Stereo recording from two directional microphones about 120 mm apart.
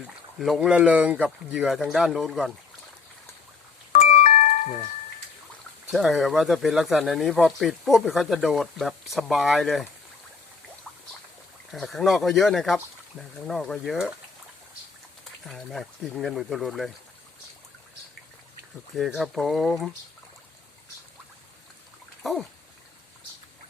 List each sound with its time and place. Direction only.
0.3 s speech: centre (ahead or behind)
3.9 s music: 70° left (ahead or behind)
5.9 s speech: centre (ahead or behind)
11.7 s speech: centre (ahead or behind)
15.4 s speech: centre (ahead or behind)
18.9 s speech: centre (ahead or behind)
22.2 s a sound: centre (ahead or behind)